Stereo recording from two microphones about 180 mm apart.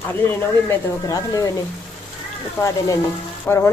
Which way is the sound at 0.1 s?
10° left (ahead or behind).